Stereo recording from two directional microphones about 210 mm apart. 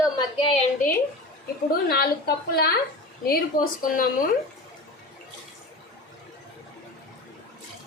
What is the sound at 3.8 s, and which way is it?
Speech, 40° left (ahead or behind).